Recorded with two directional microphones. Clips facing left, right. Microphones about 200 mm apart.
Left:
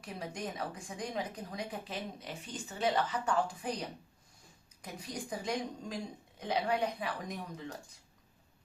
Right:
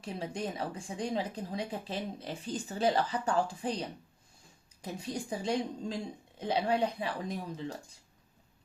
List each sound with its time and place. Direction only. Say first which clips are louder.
0.0 s speech: right 4 dB; 30° right (ahead or behind)